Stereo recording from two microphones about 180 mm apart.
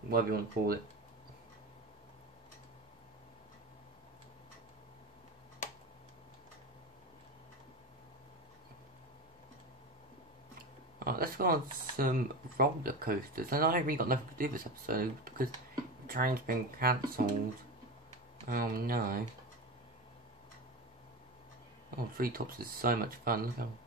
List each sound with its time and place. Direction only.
0.1 s speech: 55° right (ahead or behind)
11.1 s a sound: 55° right (ahead or behind)
12.0 s speech: 55° right (ahead or behind)
18.5 s speech: 55° right (ahead or behind)
21.9 s speech: 55° right (ahead or behind)